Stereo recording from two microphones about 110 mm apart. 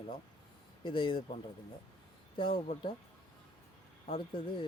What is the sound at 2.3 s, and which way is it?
Speech, 50° left (ahead or behind).